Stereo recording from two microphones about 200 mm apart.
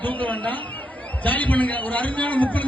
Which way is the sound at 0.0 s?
10° left (ahead or behind).